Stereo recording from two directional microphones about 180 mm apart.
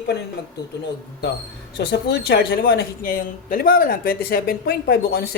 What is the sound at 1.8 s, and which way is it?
Speech, 65° left (ahead or behind).